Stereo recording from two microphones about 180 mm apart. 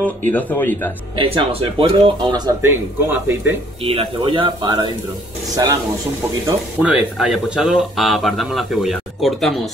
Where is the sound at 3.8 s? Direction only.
30° right (ahead or behind).